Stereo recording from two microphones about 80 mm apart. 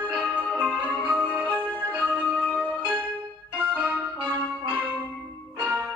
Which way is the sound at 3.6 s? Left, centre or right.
Centre.